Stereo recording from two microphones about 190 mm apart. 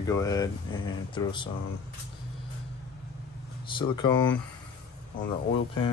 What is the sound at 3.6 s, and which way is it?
Speech, 25° left (ahead or behind).